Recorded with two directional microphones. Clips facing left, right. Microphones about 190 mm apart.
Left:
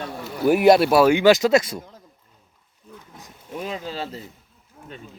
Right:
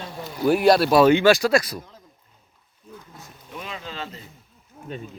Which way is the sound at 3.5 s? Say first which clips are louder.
Left 5 dB; 40° left (ahead or behind).